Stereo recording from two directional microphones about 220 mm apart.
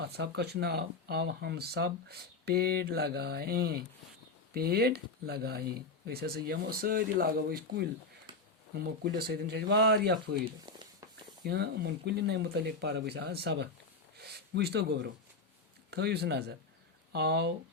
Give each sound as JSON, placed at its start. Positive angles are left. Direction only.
{"t": 0.0, "sound": "speech", "side_deg": -50}
{"t": 10.7, "sound": "a sound", "side_deg": -20}
{"t": 11.4, "sound": "speech", "side_deg": -50}